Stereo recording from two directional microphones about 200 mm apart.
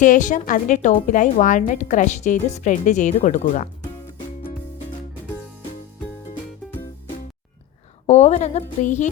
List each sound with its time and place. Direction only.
0.0 s a woman's voice: 40° left (ahead or behind)
8.0 s a woman's voice: 35° left (ahead or behind)